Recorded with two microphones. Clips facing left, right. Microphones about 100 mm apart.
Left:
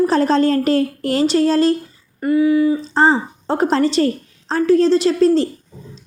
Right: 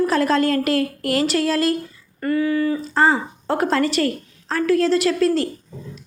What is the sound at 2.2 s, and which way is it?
Speech, 15° left (ahead or behind).